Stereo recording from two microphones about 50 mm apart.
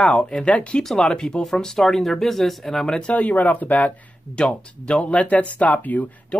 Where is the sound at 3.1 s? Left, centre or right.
Left.